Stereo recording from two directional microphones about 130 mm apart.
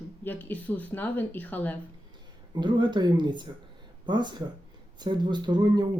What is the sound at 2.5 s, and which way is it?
Speech, 35° right (ahead or behind).